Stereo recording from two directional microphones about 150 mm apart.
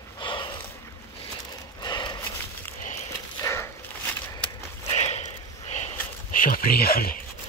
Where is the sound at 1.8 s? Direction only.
30° left (ahead or behind).